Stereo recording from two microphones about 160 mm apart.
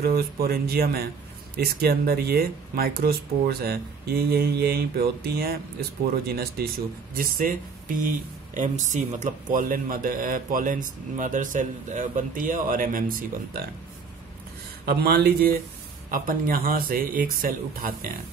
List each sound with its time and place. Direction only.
0.0 s speech: 75° right (ahead or behind)
7.2 s speech: 65° right (ahead or behind)
14.9 s speech: 80° right
16.1 s speech: 65° right (ahead or behind)